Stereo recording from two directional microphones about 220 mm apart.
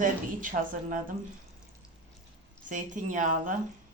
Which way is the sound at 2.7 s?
35° right (ahead or behind).